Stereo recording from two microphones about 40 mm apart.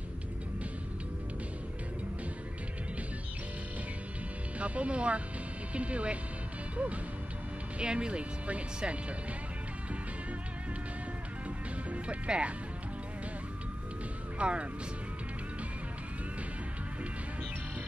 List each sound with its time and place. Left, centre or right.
4.6 s speech: right
7.8 s speech: right
11.9 s speech: right
14.4 s speech: right